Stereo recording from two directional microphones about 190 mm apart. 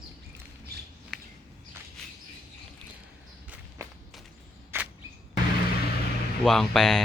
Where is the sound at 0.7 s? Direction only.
55° right (ahead or behind).